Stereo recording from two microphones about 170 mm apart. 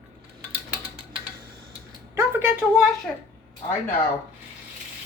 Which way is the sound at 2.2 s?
15° right (ahead or behind).